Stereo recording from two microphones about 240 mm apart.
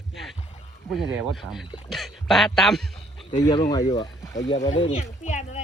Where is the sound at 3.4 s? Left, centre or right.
Centre.